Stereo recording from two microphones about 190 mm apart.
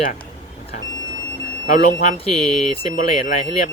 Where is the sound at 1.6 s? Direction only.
40° left (ahead or behind).